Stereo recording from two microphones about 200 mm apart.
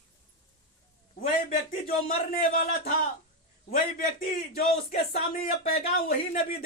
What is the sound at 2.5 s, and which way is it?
A man's voice, 40° left (ahead or behind).